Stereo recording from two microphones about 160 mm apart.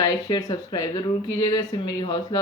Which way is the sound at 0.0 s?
25° left (ahead or behind).